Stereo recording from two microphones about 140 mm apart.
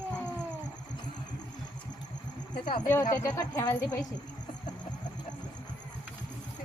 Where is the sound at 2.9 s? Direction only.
20° left (ahead or behind).